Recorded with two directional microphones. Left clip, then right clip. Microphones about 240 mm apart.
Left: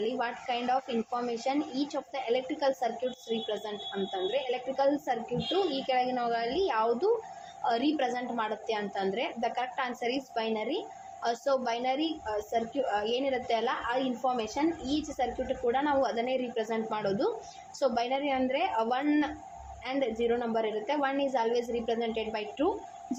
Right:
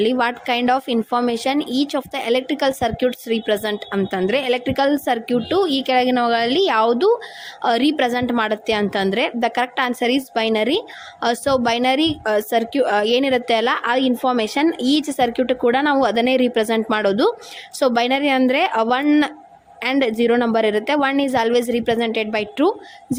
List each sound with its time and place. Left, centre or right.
0.0 s a woman's voice: right